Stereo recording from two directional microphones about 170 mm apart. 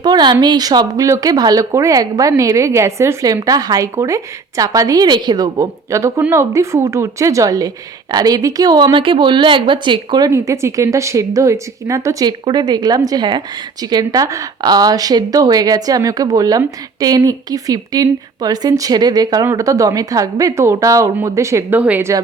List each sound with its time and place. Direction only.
0.0 s a woman's voice: 25° right (ahead or behind)